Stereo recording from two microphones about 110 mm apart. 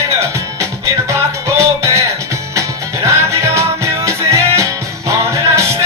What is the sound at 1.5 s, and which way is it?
Music, 25° right (ahead or behind).